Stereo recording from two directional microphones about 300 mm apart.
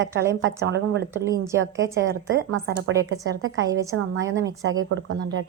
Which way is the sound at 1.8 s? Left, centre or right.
Right.